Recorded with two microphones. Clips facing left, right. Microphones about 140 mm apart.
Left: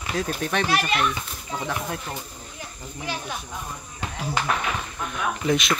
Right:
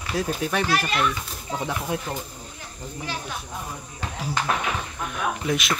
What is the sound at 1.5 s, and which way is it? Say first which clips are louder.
Speech: right 2 dB; 15° right (ahead or behind).